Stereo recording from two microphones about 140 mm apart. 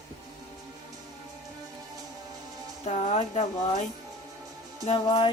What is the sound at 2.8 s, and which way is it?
Speech, 55° left (ahead or behind).